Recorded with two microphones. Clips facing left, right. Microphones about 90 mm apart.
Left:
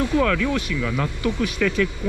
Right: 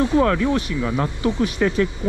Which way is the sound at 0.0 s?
30° right (ahead or behind).